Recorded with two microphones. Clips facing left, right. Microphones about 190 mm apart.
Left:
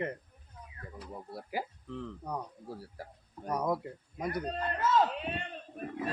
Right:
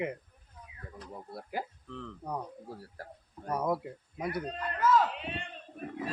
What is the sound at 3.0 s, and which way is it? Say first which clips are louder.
Speech: even; 15° left (ahead or behind).